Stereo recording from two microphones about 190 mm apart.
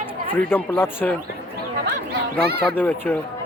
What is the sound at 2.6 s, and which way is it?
Speech, 10° left (ahead or behind).